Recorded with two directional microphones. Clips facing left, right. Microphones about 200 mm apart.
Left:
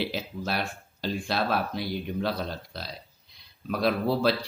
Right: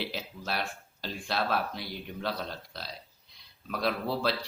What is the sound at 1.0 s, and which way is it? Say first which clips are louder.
Speech: left 4 dB; 10° left (ahead or behind).